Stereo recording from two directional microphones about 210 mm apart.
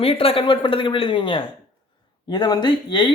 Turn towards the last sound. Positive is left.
turn(degrees=20)  # may be behind; listen again after turning